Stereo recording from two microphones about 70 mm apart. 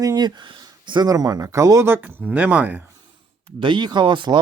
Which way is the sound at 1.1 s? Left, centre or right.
Right.